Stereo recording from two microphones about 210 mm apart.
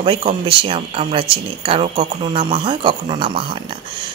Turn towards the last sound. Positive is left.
turn(degrees=-25)  # may be behind; listen again after turning